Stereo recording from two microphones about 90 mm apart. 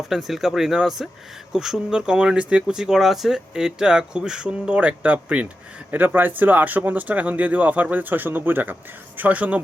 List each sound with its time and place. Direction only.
0.0 s speech: 5° right (ahead or behind)